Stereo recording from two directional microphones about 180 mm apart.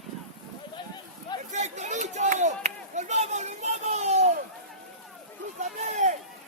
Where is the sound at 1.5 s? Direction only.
40° right (ahead or behind).